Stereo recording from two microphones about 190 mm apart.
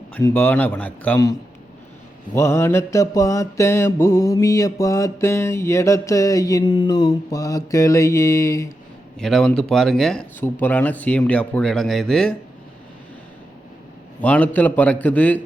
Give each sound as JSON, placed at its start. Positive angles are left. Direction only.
{"t": 0.1, "sound": "mantra", "side_deg": 10}
{"t": 2.3, "sound": "mantra", "side_deg": 15}
{"t": 9.1, "sound": "speech", "side_deg": 5}
{"t": 14.2, "sound": "mantra", "side_deg": 5}